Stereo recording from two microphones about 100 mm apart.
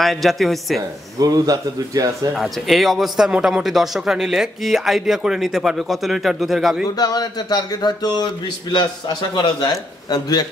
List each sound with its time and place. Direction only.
0.0 s speech: centre (ahead or behind)
0.7 s speech: 35° right (ahead or behind)
2.3 s speech: centre (ahead or behind)
7.0 s speech: 40° left (ahead or behind)
9.3 s speech: 45° left (ahead or behind)